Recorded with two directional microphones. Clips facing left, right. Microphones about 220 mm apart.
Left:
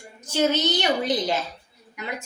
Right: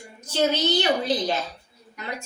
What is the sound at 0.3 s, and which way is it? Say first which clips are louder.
A woman's voice: even; 15° left (ahead or behind).